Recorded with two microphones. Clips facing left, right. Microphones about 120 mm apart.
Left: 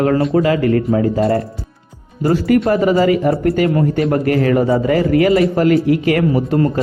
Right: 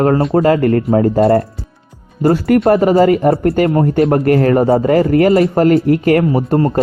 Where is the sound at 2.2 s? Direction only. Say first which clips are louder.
Right 3 dB; 55° right (ahead or behind).